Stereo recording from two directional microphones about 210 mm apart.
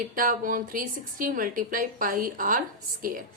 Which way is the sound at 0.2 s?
40° right (ahead or behind).